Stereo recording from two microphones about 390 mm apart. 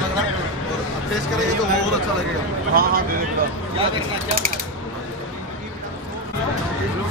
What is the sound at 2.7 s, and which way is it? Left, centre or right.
Speech, right.